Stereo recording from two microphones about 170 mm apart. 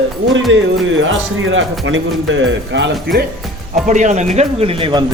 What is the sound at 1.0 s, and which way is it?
A man's voice, 90° right.